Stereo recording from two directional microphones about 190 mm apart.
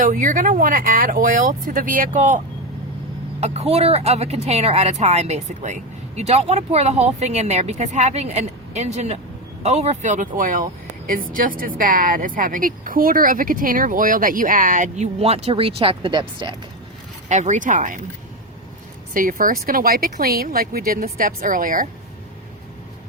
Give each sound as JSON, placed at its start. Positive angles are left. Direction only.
{"t": 0.0, "sound": "speech", "side_deg": -45}
{"t": 3.4, "sound": "a woman's voice", "side_deg": -35}
{"t": 17.2, "sound": "a woman's voice", "side_deg": -40}
{"t": 19.1, "sound": "speech", "side_deg": -45}